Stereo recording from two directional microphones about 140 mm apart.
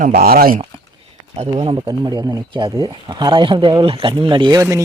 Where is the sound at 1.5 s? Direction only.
40° right (ahead or behind).